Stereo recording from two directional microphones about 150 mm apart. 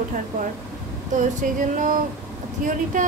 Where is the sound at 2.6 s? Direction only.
65° right (ahead or behind).